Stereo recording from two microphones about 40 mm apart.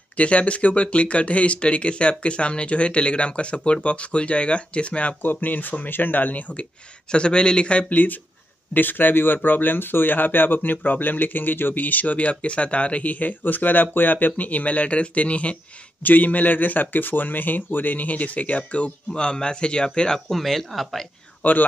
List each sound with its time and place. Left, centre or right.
0.2 s speech: left
5.2 s speech: left
7.1 s speech: left
7.9 s speech: left
16.0 s speech: left
20.2 s speech: centre
21.4 s speech: left